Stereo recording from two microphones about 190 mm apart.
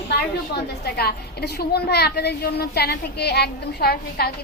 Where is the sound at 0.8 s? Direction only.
55° left (ahead or behind).